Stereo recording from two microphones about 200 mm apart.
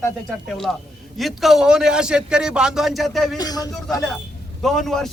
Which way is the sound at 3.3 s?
20° left (ahead or behind).